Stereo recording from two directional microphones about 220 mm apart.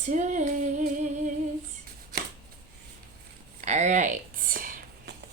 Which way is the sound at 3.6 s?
35° right (ahead or behind).